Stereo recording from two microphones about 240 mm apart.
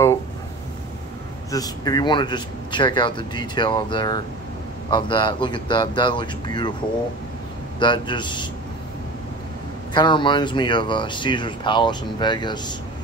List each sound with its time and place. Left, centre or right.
1.5 s speech: centre
7.8 s speech: centre
9.9 s speech: centre